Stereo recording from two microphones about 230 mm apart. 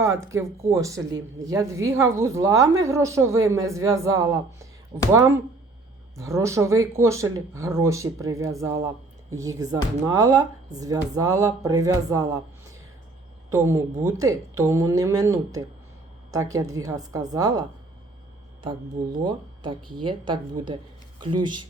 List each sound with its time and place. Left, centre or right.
0.0 s speech: centre
6.1 s speech: centre
13.5 s speech: centre
19.2 s speech: right